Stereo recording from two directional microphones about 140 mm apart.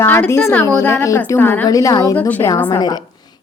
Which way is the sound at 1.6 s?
25° left (ahead or behind).